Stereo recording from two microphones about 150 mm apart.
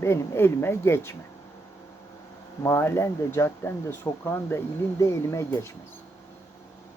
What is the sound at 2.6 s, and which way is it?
Speech, 15° left (ahead or behind).